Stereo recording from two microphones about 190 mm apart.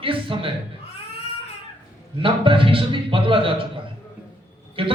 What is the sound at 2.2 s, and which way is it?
A man's voice, 25° right (ahead or behind).